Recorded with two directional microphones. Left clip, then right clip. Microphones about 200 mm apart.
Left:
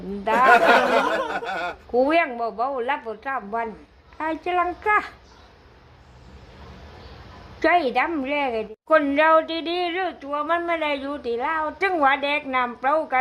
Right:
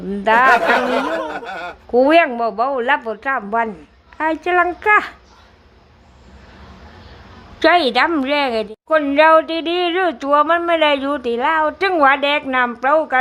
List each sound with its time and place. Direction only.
0.4 s a man's voice: centre (ahead or behind)
1.9 s a woman's voice: 15° right (ahead or behind)
7.6 s a woman's voice: 5° right (ahead or behind)
10.2 s speech: 30° right (ahead or behind)
10.4 s a woman's voice: 15° right (ahead or behind)